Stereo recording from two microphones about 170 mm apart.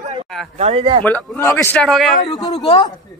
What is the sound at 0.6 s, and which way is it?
Speech, 35° right (ahead or behind).